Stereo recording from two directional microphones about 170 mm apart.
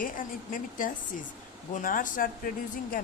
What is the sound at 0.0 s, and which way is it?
Speech, 55° left (ahead or behind).